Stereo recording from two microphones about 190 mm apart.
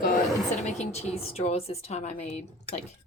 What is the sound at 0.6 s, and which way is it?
Speech, 35° left (ahead or behind).